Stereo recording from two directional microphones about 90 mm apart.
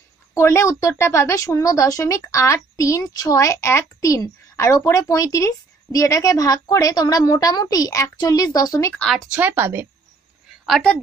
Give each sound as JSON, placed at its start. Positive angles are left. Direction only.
{"t": 0.3, "sound": "a woman's voice", "side_deg": 30}
{"t": 8.9, "sound": "speech", "side_deg": 5}
{"t": 9.3, "sound": "speech", "side_deg": -20}